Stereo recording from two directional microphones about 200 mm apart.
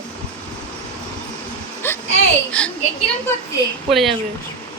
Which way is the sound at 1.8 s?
10° left (ahead or behind).